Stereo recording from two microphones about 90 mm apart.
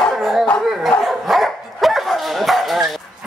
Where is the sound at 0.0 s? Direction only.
Centre (ahead or behind).